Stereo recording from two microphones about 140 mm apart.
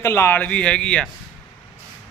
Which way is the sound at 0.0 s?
15° left (ahead or behind).